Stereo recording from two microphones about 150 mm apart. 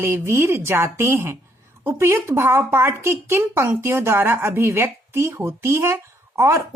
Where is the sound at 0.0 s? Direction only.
15° right (ahead or behind).